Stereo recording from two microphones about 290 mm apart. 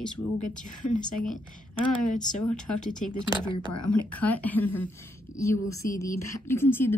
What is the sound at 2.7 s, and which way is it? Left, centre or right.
Speech, left.